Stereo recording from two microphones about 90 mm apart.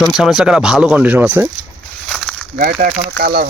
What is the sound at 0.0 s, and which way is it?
Speech, 5° right (ahead or behind).